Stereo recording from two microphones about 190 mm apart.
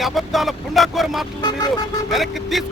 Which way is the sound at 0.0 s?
Centre (ahead or behind).